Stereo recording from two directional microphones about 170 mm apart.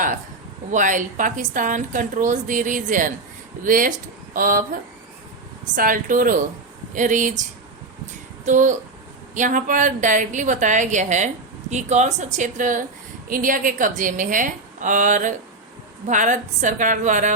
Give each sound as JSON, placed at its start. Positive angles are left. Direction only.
{"t": 0.7, "sound": "a woman's voice", "side_deg": -50}
{"t": 8.4, "sound": "a woman's voice", "side_deg": -45}